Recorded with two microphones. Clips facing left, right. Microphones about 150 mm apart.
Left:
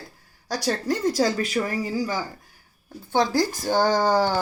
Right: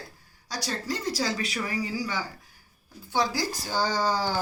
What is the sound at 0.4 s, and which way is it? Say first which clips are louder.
A woman's voice: left 7 dB; 55° left (ahead or behind).